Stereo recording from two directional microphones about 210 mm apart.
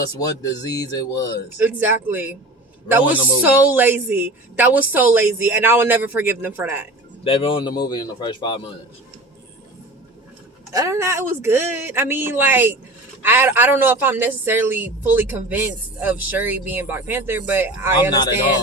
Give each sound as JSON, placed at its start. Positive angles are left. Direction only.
{"t": 0.0, "sound": "speech", "side_deg": 20}
{"t": 1.5, "sound": "a woman's voice", "side_deg": -10}
{"t": 7.3, "sound": "speech", "side_deg": 25}
{"t": 10.7, "sound": "a woman's voice", "side_deg": -15}